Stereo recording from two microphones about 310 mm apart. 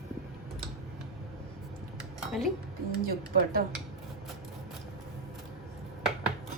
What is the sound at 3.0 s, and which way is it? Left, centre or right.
Speech, right.